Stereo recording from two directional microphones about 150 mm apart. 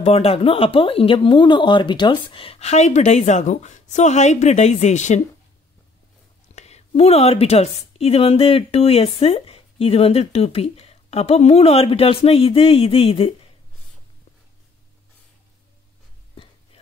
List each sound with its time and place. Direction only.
0.0 s a woman's voice: 40° left (ahead or behind)
6.5 s a woman's voice: 45° left (ahead or behind)
16.4 s a sound: 40° left (ahead or behind)